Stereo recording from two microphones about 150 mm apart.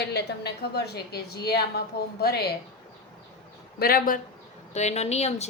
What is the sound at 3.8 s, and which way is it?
Speech, 80° left.